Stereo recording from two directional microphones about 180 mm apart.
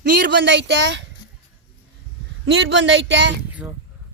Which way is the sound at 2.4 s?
90° right.